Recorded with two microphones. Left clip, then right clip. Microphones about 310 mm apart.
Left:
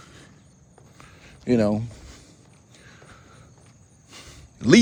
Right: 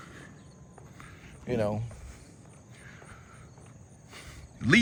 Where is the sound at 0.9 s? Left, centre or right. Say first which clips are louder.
Left 3 dB; centre.